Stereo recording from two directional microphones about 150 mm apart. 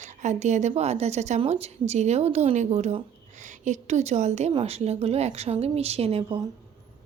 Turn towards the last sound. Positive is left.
turn(degrees=-40)  # may be behind; listen again after turning